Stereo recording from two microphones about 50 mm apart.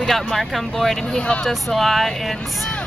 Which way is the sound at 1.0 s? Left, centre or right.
Centre.